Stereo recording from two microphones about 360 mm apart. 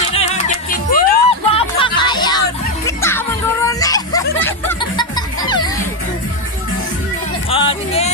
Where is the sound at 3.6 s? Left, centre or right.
Centre.